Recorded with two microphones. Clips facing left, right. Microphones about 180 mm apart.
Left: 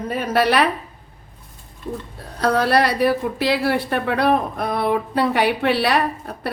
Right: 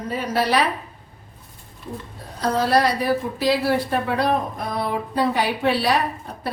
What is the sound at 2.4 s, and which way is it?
A woman's voice, 65° left (ahead or behind).